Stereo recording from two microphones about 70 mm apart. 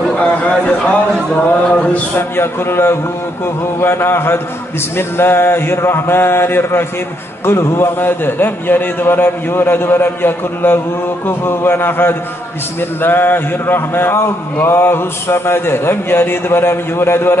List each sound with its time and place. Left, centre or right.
0.1 s speech: centre
1.3 s a sound: centre
2.1 s speech: left